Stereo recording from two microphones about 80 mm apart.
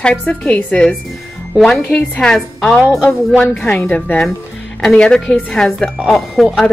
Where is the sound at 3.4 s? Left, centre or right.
Centre.